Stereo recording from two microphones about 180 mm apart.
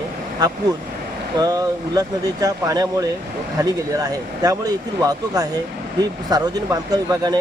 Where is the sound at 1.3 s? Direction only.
20° right (ahead or behind).